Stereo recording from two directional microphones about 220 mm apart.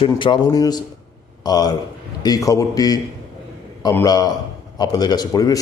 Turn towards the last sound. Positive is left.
turn(degrees=15)  # may be behind; listen again after turning